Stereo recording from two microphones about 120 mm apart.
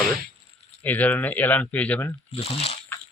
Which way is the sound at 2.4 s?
55° left (ahead or behind).